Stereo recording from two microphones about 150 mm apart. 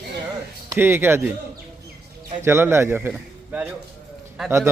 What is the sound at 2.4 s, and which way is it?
A man's voice, 15° right (ahead or behind).